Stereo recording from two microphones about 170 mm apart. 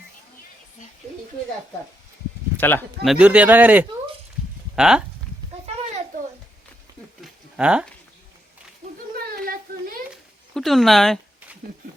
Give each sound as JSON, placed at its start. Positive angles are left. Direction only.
{"t": 2.6, "sound": "speech", "side_deg": 10}
{"t": 3.0, "sound": "speech", "side_deg": -5}
{"t": 7.2, "sound": "a sound", "side_deg": -5}
{"t": 10.5, "sound": "speech", "side_deg": 0}